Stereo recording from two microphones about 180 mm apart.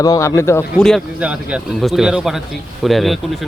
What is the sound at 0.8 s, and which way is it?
A man's voice, centre (ahead or behind).